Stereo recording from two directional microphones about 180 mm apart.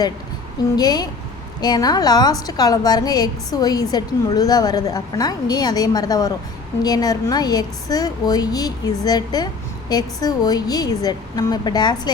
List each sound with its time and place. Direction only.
0.8 s a woman's voice: 20° left (ahead or behind)